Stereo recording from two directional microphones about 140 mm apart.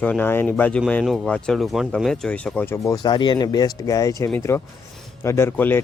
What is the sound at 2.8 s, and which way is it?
Speech, 25° left (ahead or behind).